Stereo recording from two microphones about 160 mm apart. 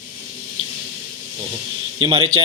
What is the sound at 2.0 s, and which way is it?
Speech, 30° right (ahead or behind).